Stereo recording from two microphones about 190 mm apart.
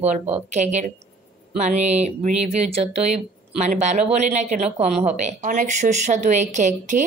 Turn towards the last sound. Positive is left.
turn(degrees=-40)  # may be behind; listen again after turning